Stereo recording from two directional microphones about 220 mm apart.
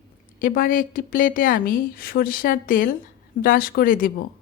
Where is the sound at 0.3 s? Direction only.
40° left (ahead or behind).